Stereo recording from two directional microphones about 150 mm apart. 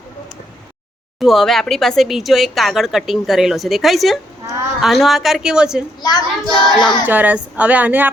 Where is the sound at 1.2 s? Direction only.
Centre (ahead or behind).